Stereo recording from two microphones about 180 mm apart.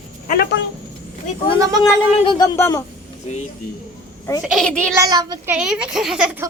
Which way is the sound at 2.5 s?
15° left (ahead or behind).